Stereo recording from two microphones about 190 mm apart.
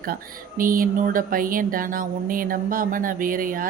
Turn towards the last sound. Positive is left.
turn(degrees=-45)  # may be behind; listen again after turning